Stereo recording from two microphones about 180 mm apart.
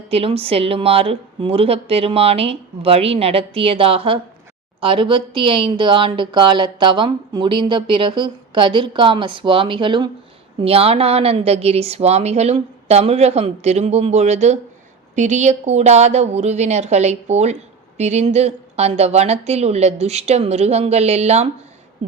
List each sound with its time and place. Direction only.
0.1 s speech: 30° right (ahead or behind)